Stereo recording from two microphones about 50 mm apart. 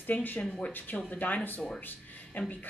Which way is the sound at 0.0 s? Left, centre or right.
Left.